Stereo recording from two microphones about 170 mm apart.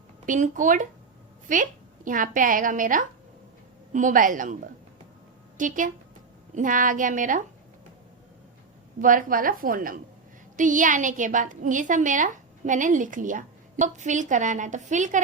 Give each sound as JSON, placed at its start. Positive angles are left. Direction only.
{"t": 0.3, "sound": "a woman's voice", "side_deg": -50}
{"t": 9.0, "sound": "a woman's voice", "side_deg": -50}